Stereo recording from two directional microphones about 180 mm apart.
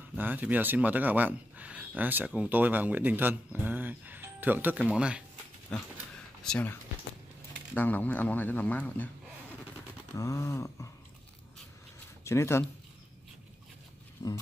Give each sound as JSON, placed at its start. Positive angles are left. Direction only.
{"t": 0.1, "sound": "speech", "side_deg": -10}
{"t": 5.7, "sound": "a man's voice", "side_deg": 5}
{"t": 10.1, "sound": "a man's voice", "side_deg": 20}
{"t": 12.3, "sound": "a man's voice", "side_deg": 15}
{"t": 14.2, "sound": "a man's voice", "side_deg": 15}